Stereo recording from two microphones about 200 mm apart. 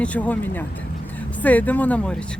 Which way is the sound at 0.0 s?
5° left (ahead or behind).